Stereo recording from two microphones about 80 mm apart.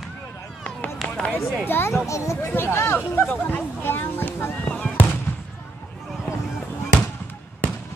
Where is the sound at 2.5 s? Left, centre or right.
Left.